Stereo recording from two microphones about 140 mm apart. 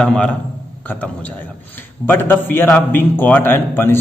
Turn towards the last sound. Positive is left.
turn(degrees=15)  # may be behind; listen again after turning